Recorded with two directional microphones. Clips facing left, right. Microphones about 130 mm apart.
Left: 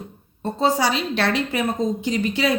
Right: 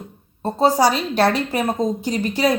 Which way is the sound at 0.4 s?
40° right (ahead or behind).